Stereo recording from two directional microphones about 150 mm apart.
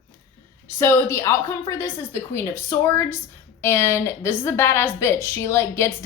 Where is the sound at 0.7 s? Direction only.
15° left (ahead or behind).